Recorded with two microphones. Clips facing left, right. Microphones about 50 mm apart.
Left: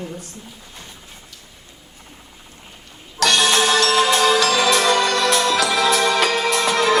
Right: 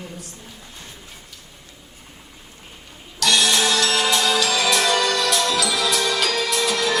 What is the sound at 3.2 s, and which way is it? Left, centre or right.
Music, left.